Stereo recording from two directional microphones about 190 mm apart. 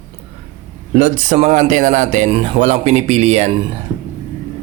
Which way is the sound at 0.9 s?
35° right (ahead or behind).